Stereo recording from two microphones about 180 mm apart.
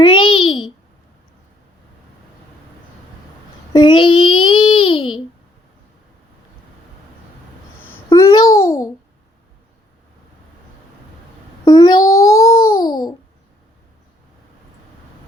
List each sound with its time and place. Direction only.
0.0 s babbling: 25° left (ahead or behind)
3.7 s babbling: 25° left (ahead or behind)
7.8 s babbling: 10° left (ahead or behind)
11.6 s babbling: 20° left (ahead or behind)